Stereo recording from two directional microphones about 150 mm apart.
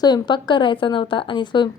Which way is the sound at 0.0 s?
30° left (ahead or behind).